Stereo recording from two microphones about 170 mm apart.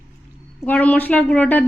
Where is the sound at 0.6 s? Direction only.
10° left (ahead or behind).